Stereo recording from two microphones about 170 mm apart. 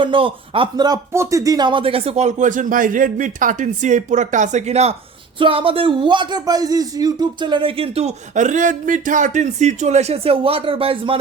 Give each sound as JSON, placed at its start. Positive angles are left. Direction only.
{"t": 0.0, "sound": "speech", "side_deg": -30}